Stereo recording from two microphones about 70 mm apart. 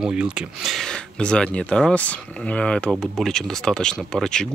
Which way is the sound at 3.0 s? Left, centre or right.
Centre.